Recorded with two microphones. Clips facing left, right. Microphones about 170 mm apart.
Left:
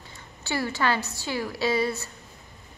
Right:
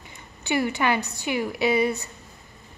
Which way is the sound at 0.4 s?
15° right (ahead or behind).